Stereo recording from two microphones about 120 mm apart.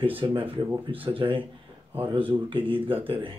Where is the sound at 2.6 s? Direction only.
50° right (ahead or behind).